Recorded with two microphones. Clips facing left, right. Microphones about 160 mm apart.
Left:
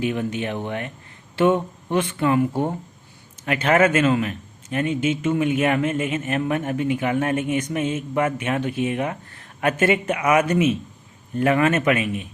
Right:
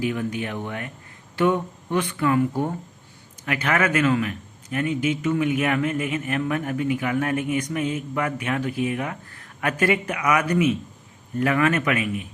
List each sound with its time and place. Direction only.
0.0 s a man's voice: 25° left (ahead or behind)